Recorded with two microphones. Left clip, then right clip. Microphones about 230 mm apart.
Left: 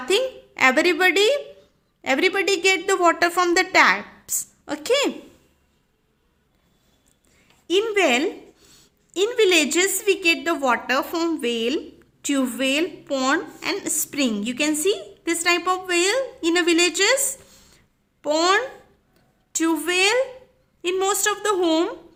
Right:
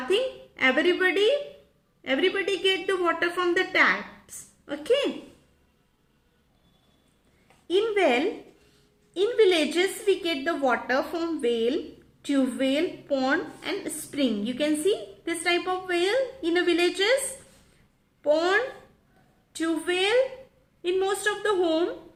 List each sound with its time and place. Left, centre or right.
0.5 s a woman's voice: left
7.7 s a woman's voice: left
18.2 s a child's voice: left